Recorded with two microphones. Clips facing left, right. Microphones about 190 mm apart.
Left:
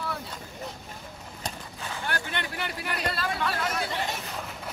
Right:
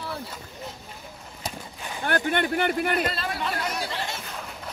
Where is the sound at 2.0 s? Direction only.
55° right (ahead or behind).